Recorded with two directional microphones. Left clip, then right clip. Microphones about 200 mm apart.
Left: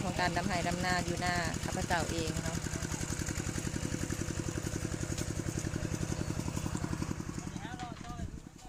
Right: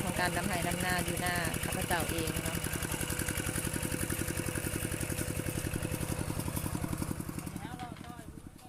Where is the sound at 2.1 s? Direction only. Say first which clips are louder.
Right 1 dB; 40° right (ahead or behind).